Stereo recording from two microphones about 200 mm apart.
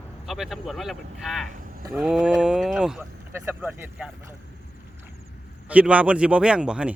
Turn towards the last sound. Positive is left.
turn(degrees=-5)  # may be behind; listen again after turning